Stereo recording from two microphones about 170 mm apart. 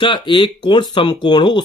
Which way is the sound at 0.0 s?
25° left (ahead or behind).